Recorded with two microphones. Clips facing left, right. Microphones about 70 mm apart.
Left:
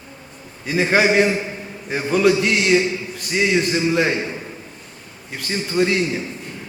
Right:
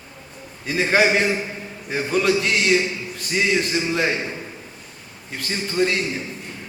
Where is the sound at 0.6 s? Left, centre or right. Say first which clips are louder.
Left 1 dB; centre.